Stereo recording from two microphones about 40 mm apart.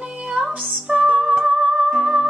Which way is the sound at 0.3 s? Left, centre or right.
Right.